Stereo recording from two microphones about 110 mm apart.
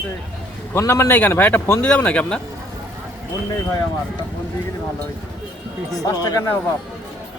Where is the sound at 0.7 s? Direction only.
25° left (ahead or behind).